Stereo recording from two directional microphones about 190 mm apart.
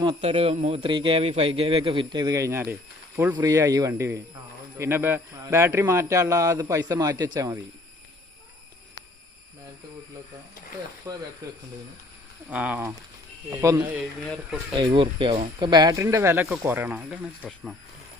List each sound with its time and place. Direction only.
0.0 s a man's voice: 30° right (ahead or behind)
11.1 s a man's voice: 15° right (ahead or behind)
12.5 s a man's voice: 5° right (ahead or behind)
14.8 s a man's voice: 25° right (ahead or behind); by 17.7 s centre (ahead or behind)